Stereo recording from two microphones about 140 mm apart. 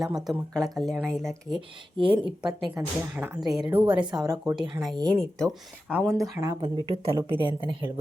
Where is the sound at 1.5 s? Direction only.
35° right (ahead or behind).